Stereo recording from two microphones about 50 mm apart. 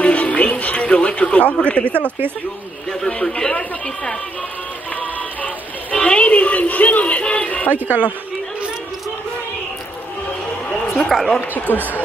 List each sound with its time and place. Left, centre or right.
0.0 s music: left
2.9 s speech: centre
5.0 s music: left
5.9 s a sound: left
7.7 s a woman's voice: right
11.1 s speech: centre
11.7 s speech: left